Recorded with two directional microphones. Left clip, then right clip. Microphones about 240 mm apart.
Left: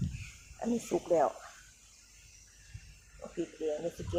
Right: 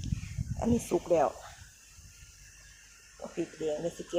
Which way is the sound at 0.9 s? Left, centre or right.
Centre.